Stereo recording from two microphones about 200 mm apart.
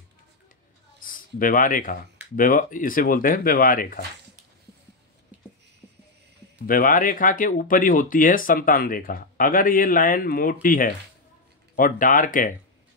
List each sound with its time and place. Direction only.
1.0 s speech: 45° left (ahead or behind)
5.3 s a sound: 5° right (ahead or behind)
6.6 s speech: 45° left (ahead or behind)